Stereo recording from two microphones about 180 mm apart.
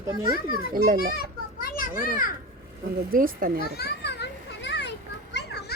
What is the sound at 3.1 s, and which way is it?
Speech, 50° right (ahead or behind).